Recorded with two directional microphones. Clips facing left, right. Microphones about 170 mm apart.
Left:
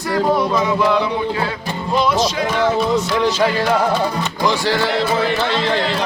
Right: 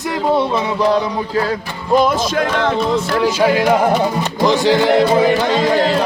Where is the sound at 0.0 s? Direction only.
25° right (ahead or behind).